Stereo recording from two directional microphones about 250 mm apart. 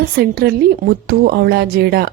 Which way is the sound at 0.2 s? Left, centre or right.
Right.